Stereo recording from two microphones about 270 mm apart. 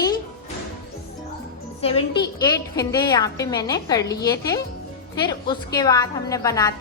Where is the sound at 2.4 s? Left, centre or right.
Centre.